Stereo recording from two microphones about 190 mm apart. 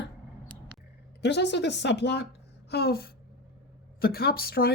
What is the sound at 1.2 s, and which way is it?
Speech, 65° left (ahead or behind).